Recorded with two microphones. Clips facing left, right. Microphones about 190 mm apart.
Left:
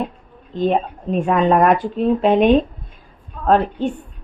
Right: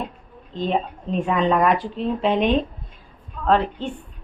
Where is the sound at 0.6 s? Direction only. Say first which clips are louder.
Left 5 dB; 50° left (ahead or behind).